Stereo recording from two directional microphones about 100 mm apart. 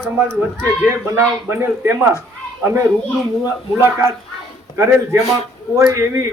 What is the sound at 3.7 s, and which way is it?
A man's voice, 20° right (ahead or behind).